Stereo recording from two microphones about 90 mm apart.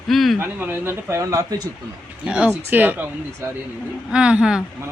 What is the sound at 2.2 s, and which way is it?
Speech, 10° right (ahead or behind).